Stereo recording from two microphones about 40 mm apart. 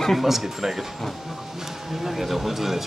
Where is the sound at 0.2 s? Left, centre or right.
Centre.